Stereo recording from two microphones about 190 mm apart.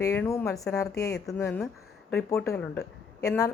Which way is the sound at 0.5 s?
Centre (ahead or behind).